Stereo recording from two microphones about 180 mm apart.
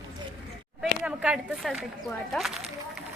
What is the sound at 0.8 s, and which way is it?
Speech, 5° right (ahead or behind).